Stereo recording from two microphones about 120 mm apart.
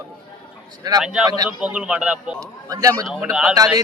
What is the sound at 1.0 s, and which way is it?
A man's voice, 5° right (ahead or behind).